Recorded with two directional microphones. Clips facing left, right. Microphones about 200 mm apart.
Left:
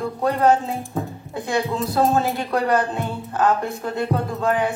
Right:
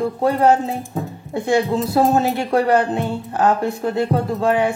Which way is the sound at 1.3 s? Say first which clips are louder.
Right 5 dB; 25° right (ahead or behind).